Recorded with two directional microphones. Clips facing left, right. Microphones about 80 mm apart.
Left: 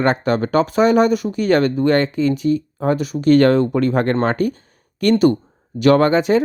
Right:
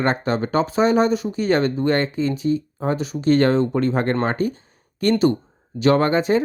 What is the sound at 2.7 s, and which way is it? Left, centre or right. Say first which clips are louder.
Speech: left 4 dB; left.